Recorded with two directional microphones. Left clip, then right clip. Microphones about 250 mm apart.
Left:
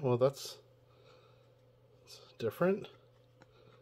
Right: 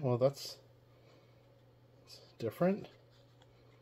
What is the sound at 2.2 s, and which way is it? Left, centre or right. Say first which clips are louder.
Speech: left 1 dB; left.